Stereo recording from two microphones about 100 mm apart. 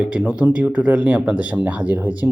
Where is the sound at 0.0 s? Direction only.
10° right (ahead or behind).